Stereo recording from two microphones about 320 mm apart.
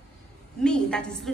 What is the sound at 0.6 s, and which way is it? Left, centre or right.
Speech, centre.